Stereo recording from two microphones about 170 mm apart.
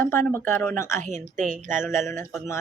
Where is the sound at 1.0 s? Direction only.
45° right (ahead or behind).